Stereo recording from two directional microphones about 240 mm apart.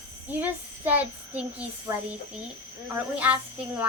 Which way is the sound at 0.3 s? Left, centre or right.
Centre.